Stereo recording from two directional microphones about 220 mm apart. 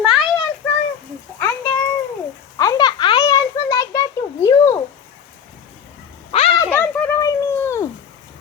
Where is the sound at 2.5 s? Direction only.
15° left (ahead or behind).